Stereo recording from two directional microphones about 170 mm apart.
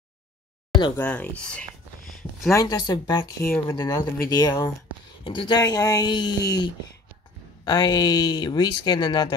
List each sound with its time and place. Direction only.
0.9 s speech: 10° left (ahead or behind)
2.0 s a sound: centre (ahead or behind)
2.5 s speech: 20° left (ahead or behind)
3.4 s speech: 15° left (ahead or behind)
3.8 s speech: 25° left (ahead or behind)